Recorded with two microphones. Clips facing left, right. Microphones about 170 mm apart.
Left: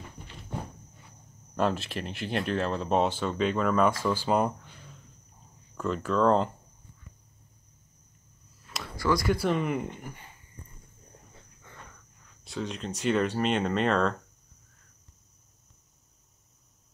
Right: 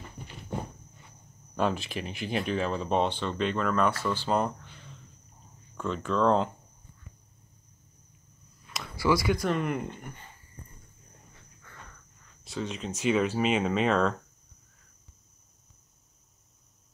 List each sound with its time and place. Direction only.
1.6 s speech: centre (ahead or behind)
5.8 s speech: 5° left (ahead or behind)
8.7 s speech: centre (ahead or behind)
11.7 s cricket: 20° left (ahead or behind)
12.4 s speech: centre (ahead or behind)